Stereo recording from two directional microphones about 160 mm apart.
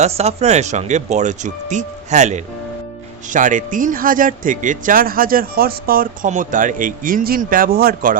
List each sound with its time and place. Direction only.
0.0 s speech: 40° right (ahead or behind); by 8.2 s 65° right (ahead or behind)